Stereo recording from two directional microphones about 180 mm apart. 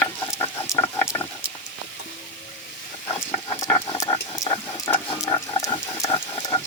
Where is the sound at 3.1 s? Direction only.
15° left (ahead or behind).